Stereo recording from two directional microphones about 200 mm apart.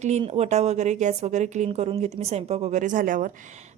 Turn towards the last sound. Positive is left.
turn(degrees=-40)  # may be behind; listen again after turning